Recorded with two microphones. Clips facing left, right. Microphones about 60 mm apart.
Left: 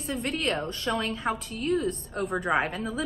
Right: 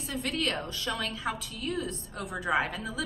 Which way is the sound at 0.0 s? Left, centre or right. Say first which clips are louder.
Left 2 dB; left.